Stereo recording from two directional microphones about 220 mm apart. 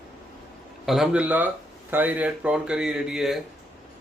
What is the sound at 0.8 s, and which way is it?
Speech, centre (ahead or behind).